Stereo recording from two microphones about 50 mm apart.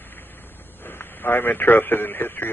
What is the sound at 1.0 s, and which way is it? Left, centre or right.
Speech, left.